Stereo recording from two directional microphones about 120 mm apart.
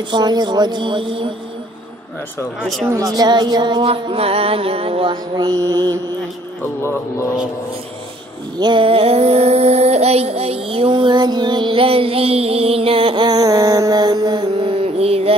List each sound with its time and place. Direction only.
0.1 s speech: 35° right (ahead or behind)
2.6 s speech: centre (ahead or behind)
2.9 s speech: 30° right (ahead or behind)
3.8 s music: 55° right (ahead or behind)
5.1 s speech: 35° right (ahead or behind)
6.8 s speech: 20° left (ahead or behind)
8.5 s child singing: 40° right (ahead or behind)